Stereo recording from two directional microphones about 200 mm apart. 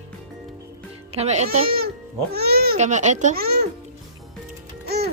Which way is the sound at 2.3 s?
50° right (ahead or behind).